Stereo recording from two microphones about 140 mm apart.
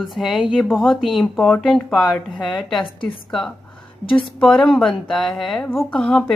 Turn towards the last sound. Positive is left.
turn(degrees=5)  # may be behind; listen again after turning